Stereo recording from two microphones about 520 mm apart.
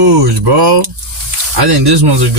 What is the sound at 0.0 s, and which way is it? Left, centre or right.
Speech, right.